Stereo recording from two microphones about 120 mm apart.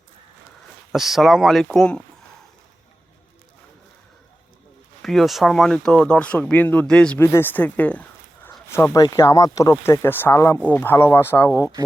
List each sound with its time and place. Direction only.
0.9 s speech: centre (ahead or behind)
5.0 s speech: centre (ahead or behind)
7.2 s speech: 20° left (ahead or behind)